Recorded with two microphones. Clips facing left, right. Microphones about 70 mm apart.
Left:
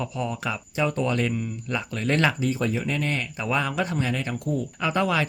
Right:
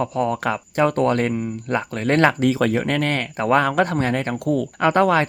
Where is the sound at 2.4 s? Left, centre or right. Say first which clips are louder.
Right 7 dB; right.